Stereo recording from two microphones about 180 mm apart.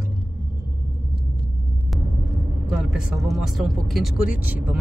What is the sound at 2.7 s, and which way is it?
Speech, 5° right (ahead or behind).